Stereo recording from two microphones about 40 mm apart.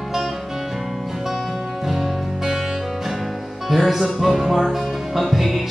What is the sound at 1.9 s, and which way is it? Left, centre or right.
Music, centre.